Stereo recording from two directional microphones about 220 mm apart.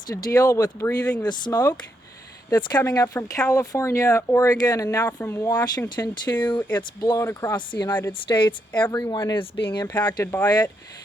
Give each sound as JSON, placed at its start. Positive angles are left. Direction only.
{"t": 0.1, "sound": "speech", "side_deg": 15}